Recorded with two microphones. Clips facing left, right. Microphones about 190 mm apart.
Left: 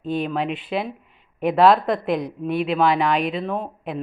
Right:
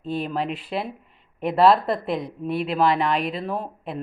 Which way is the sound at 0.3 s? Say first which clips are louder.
Left 2 dB; centre (ahead or behind).